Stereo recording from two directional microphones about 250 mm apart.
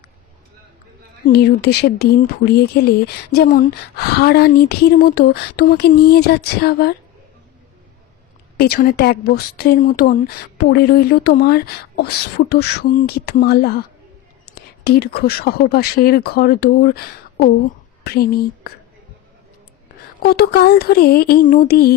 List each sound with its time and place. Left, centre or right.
1.3 s speech: left
8.5 s speech: left
20.2 s speech: left